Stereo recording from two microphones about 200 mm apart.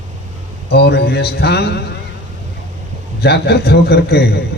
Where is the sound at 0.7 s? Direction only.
55° left (ahead or behind).